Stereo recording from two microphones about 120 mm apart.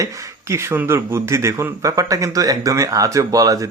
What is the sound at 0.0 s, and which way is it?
Speech, 25° right (ahead or behind).